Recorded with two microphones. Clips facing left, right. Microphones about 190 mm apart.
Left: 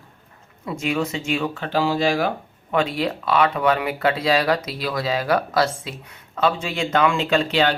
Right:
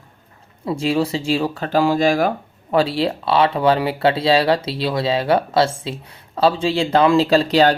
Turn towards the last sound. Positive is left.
turn(degrees=-40)  # may be behind; listen again after turning